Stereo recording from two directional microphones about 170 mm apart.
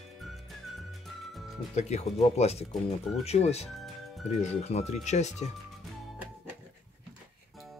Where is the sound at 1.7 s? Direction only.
40° left (ahead or behind).